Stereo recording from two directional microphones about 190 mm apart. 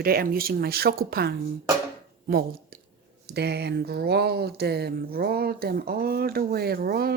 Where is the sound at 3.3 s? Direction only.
60° right (ahead or behind).